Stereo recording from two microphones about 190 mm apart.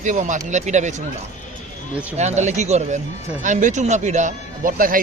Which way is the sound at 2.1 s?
35° right (ahead or behind).